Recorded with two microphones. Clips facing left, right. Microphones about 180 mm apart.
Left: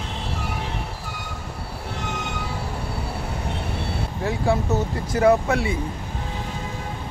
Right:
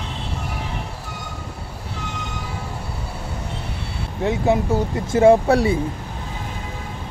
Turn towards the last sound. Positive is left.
turn(degrees=-35)  # may be behind; listen again after turning